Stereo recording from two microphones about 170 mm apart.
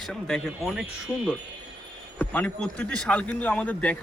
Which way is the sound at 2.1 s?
10° left (ahead or behind).